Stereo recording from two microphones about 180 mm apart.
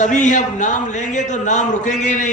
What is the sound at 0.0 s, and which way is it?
A man's voice, 40° left (ahead or behind).